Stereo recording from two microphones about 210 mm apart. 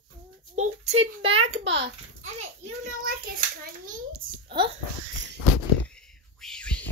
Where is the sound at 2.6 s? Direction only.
40° right (ahead or behind).